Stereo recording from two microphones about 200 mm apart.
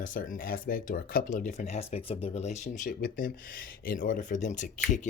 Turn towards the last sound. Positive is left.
turn(degrees=40)  # may be behind; listen again after turning